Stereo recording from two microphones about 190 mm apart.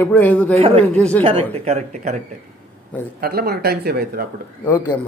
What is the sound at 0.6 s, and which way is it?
Speech, 35° right (ahead or behind).